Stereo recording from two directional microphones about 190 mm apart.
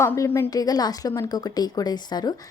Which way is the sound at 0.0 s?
15° left (ahead or behind).